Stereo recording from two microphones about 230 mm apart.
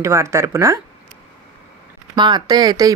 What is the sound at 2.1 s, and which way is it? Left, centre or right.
Speech, centre.